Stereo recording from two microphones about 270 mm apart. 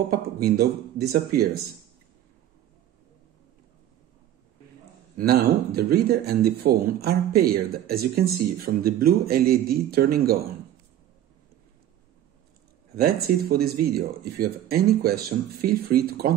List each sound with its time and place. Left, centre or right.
0.1 s speech: right
5.1 s speech: right
12.9 s speech: right